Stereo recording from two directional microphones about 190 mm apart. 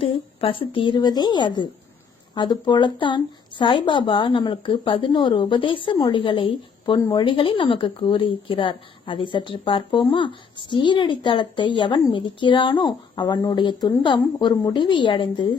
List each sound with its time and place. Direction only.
0.0 s speech: 30° left (ahead or behind)